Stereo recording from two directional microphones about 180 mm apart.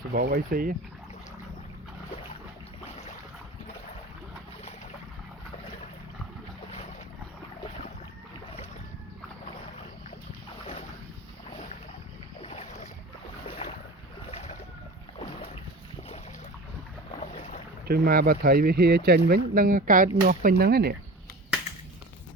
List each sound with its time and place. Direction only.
0.1 s speech: 55° right (ahead or behind)
12.4 s boat: 35° left (ahead or behind)
14.3 s boat: 35° left (ahead or behind)
17.8 s speech: 60° right (ahead or behind)